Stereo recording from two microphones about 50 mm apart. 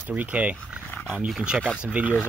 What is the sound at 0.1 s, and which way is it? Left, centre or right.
Speech, right.